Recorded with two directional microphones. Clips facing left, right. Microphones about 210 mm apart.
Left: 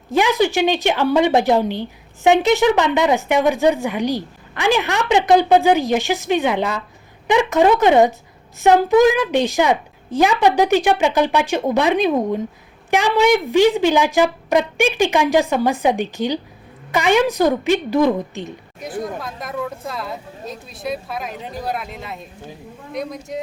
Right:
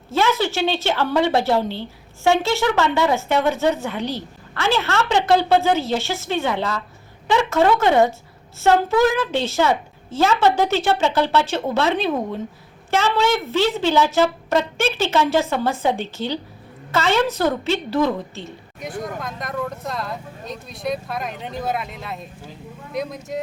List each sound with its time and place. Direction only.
0.1 s a woman's voice: 15° left (ahead or behind)
18.8 s speech: centre (ahead or behind)